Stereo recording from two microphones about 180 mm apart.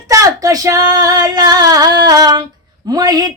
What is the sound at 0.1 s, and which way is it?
Speech, 20° right (ahead or behind).